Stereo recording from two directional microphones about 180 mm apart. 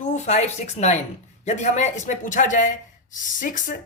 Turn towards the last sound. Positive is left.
turn(degrees=45)  # may be behind; listen again after turning